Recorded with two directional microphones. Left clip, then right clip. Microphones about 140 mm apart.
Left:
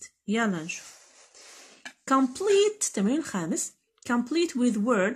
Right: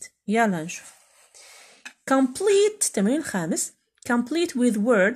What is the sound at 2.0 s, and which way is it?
Speech, 30° right (ahead or behind).